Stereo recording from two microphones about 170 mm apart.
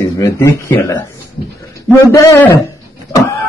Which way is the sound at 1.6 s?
15° left (ahead or behind).